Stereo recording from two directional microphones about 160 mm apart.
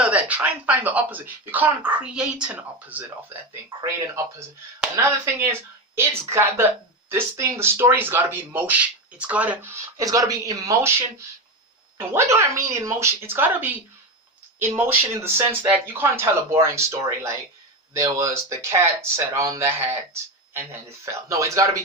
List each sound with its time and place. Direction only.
0.0 s a man's voice: 10° right (ahead or behind)